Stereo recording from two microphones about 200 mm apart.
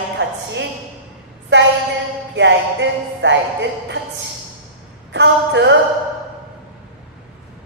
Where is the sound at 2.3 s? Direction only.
65° right (ahead or behind).